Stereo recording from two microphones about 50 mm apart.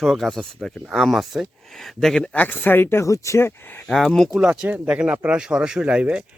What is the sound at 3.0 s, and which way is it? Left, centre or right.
Speech, left.